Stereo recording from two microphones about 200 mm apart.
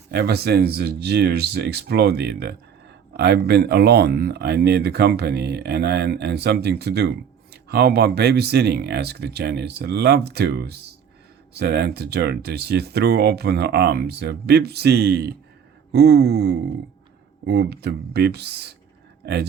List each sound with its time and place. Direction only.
0.1 s speech: 55° right (ahead or behind)